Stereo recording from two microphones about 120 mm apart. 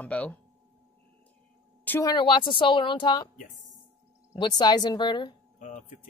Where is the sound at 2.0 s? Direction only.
40° left (ahead or behind).